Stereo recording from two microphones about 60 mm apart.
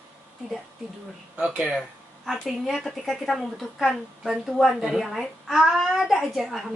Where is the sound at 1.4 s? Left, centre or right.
Centre.